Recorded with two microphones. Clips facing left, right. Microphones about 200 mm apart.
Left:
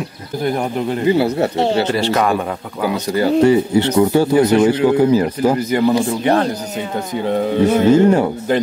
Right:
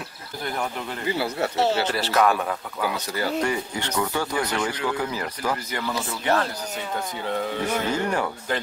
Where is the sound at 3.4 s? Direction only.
25° left (ahead or behind).